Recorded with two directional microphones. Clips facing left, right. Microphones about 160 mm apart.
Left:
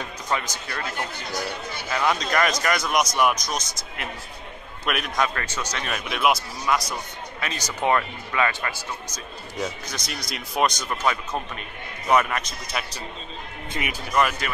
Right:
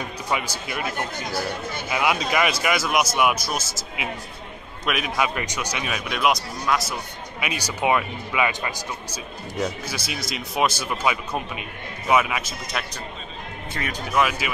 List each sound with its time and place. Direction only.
0.3 s speech: 10° right (ahead or behind)
1.9 s a man's voice: 10° right (ahead or behind)
7.3 s speech: 10° right (ahead or behind)
9.6 s a man's voice: 5° right (ahead or behind)
13.8 s speech: 20° left (ahead or behind)
14.1 s a man's voice: centre (ahead or behind)